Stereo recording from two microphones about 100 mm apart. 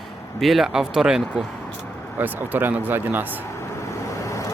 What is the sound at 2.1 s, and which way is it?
Speech, 20° right (ahead or behind).